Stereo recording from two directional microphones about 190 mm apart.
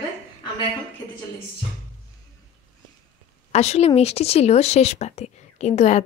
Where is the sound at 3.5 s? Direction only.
35° left (ahead or behind).